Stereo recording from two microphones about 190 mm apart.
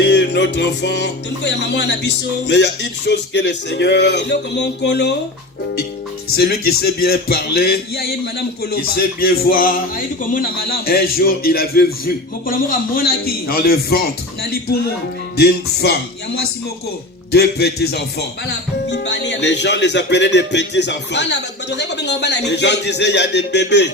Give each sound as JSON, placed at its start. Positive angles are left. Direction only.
{"t": 0.0, "sound": "speech", "side_deg": 65}
{"t": 6.3, "sound": "a man's voice", "side_deg": 55}
{"t": 15.4, "sound": "speech", "side_deg": 55}